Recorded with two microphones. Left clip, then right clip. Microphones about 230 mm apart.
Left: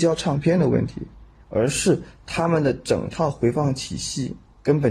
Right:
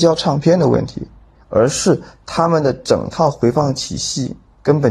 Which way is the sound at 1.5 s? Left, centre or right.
Centre.